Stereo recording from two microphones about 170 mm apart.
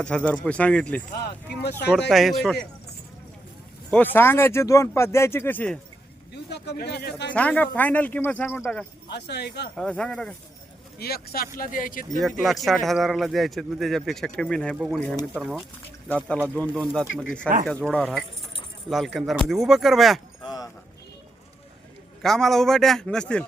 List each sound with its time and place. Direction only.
0.0 s speech: 5° left (ahead or behind)
2.0 s speech: centre (ahead or behind)
3.9 s speech: 10° left (ahead or behind)
6.3 s speech: 75° left (ahead or behind)
7.3 s speech: 10° left (ahead or behind)
9.0 s speech: 75° left (ahead or behind)
9.7 s speech: 5° left (ahead or behind)
10.9 s speech: 65° left (ahead or behind)
12.1 s speech: centre (ahead or behind)
20.4 s a sound: 25° left (ahead or behind)
22.2 s speech: centre (ahead or behind)